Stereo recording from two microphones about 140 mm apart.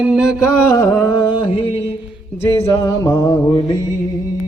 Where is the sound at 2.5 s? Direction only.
45° left (ahead or behind).